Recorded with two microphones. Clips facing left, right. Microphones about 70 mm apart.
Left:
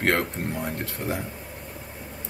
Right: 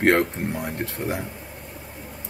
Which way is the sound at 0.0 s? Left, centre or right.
Right.